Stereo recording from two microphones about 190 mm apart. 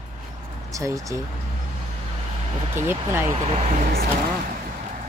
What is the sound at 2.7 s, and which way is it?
Speech, 10° right (ahead or behind).